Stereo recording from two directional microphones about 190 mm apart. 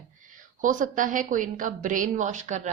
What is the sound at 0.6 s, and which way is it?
A woman's voice, 45° right (ahead or behind).